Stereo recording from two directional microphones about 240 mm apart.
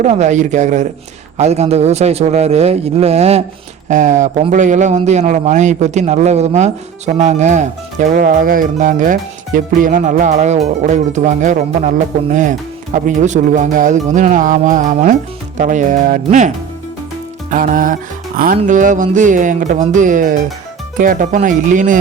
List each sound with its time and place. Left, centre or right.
0.0 s a man's voice: right
17.5 s speech: right